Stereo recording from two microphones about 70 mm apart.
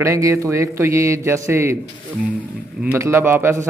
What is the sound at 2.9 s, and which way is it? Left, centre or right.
Speech, right.